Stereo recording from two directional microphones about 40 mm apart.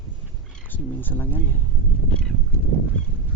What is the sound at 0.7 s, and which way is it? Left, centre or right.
Speech, left.